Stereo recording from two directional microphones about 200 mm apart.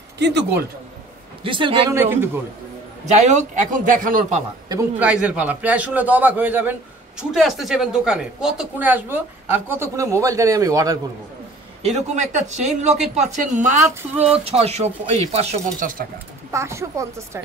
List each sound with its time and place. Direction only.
0.2 s speech: 60° right (ahead or behind)
1.4 s a man's voice: 25° right (ahead or behind)
2.0 s a man's voice: 10° right (ahead or behind)
3.1 s speech: 35° right (ahead or behind)
4.6 s a man's voice: 10° right (ahead or behind)
11.8 s speech: 35° right (ahead or behind)
16.5 s a man's voice: 15° right (ahead or behind)